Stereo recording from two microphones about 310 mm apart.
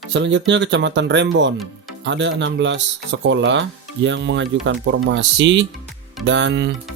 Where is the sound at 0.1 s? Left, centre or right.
Right.